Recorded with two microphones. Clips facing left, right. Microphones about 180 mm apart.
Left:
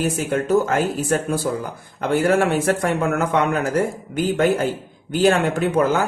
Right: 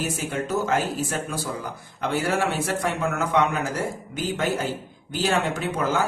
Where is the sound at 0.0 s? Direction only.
55° left (ahead or behind).